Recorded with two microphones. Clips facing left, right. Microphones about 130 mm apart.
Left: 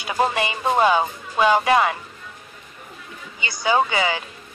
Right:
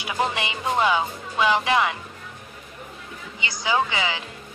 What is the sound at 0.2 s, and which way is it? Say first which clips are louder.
Speech: left 4 dB; 40° left (ahead or behind).